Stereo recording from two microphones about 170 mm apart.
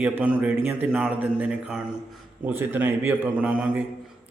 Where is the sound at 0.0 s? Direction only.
10° right (ahead or behind).